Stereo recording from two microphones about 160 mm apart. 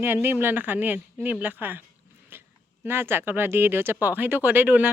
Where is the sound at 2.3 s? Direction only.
15° right (ahead or behind).